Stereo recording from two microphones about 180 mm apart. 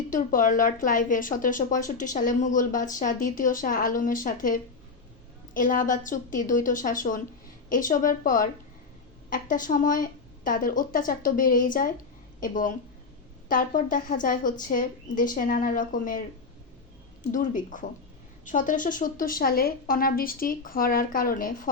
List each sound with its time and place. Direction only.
0.1 s speech: 45° left (ahead or behind)
17.3 s speech: 45° left (ahead or behind)